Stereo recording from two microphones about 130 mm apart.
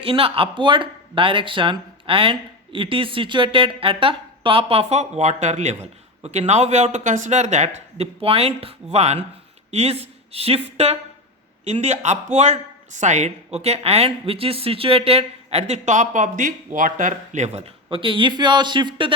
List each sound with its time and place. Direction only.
0.0 s a woman's voice: 45° right (ahead or behind)
17.9 s speech: 40° right (ahead or behind)